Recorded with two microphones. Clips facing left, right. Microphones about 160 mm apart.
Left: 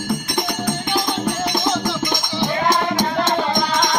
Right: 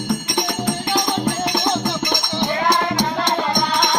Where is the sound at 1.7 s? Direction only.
20° right (ahead or behind).